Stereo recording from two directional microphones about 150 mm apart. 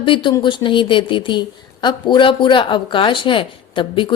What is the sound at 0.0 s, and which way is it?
A woman's voice, 35° left (ahead or behind).